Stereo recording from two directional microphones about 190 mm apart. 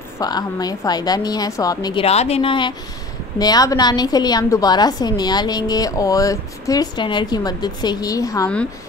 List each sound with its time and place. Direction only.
0.2 s a woman's voice: 20° left (ahead or behind)
2.0 s a woman's voice: 35° left (ahead or behind); by 8.5 s 20° left (ahead or behind)